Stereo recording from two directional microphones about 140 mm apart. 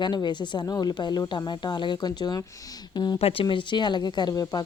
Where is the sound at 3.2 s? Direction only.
40° left (ahead or behind).